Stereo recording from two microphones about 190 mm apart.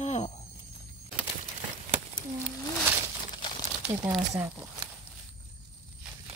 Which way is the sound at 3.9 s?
20° right (ahead or behind).